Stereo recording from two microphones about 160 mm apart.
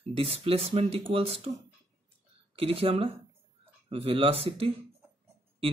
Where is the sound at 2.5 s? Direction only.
35° right (ahead or behind).